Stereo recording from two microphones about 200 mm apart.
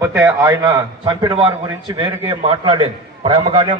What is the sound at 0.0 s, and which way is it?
A man's voice, 15° right (ahead or behind).